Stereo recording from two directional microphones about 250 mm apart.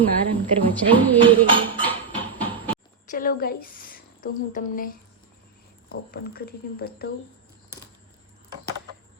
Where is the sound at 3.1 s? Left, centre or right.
Left.